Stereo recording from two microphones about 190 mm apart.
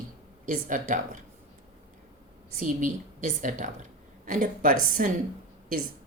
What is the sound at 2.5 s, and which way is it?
A woman's voice, 40° right (ahead or behind).